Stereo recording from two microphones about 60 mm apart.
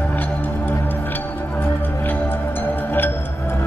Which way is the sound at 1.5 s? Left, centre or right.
Left.